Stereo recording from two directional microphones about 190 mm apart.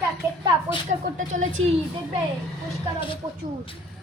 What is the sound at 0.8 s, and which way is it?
Speech, 40° right (ahead or behind).